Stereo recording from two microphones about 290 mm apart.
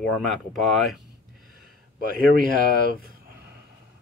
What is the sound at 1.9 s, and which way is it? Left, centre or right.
Speech, right.